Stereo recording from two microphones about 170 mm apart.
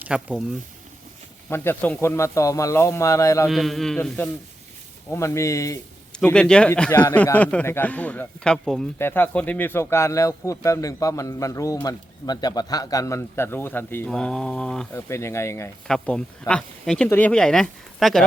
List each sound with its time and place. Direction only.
0.0 s speech: 5° right (ahead or behind)
1.5 s speech: 15° left (ahead or behind)
3.4 s speech: centre (ahead or behind)
5.1 s speech: 15° left (ahead or behind)
6.1 s speech: 5° left (ahead or behind)
14.9 s speech: 15° left (ahead or behind)
15.9 s speech: 5° left (ahead or behind)